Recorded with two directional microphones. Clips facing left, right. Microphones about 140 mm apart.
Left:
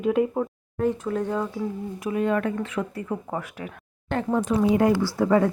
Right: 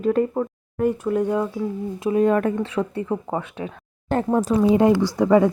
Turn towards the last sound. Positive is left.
turn(degrees=-15)  # may be behind; listen again after turning